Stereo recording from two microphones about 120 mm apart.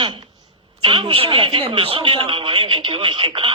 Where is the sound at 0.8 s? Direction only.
50° right (ahead or behind).